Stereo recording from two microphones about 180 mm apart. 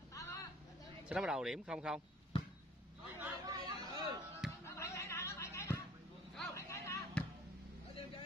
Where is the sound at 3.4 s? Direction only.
20° right (ahead or behind).